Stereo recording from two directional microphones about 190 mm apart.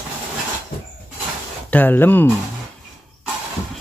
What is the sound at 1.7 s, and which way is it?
Speech, 10° left (ahead or behind).